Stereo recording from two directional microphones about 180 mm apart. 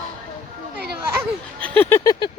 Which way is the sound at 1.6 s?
10° left (ahead or behind).